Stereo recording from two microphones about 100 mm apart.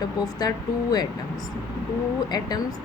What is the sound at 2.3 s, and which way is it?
Speech, 40° left (ahead or behind).